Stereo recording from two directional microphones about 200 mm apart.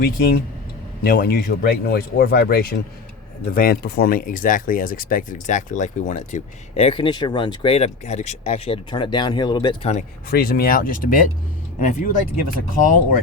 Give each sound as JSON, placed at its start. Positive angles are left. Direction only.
{"t": 0.0, "sound": "speech", "side_deg": 50}
{"t": 9.9, "sound": "speech", "side_deg": 50}